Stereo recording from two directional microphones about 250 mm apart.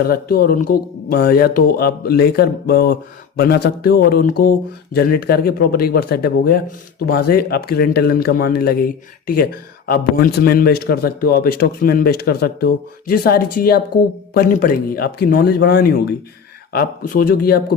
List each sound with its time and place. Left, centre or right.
0.0 s a man's voice: left